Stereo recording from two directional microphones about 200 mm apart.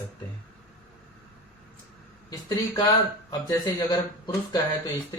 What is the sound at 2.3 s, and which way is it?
Speech, 20° left (ahead or behind).